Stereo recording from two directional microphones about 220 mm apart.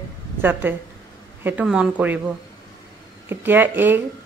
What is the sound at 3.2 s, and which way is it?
Speech, 10° right (ahead or behind).